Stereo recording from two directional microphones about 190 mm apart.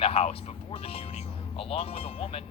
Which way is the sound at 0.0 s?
30° left (ahead or behind).